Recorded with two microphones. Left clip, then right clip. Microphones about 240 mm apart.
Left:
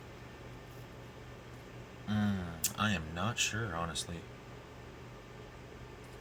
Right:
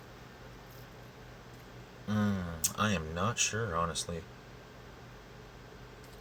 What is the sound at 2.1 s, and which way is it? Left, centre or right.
Speech, right.